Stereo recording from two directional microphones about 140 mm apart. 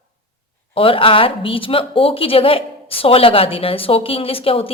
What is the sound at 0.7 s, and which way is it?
Speech, 40° left (ahead or behind).